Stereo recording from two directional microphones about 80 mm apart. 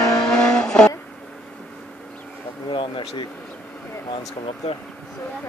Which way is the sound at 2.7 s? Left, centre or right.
Left.